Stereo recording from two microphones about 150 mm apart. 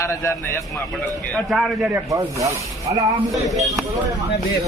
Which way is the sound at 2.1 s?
20° right (ahead or behind).